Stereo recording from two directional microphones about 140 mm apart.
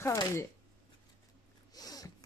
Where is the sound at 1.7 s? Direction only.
25° left (ahead or behind).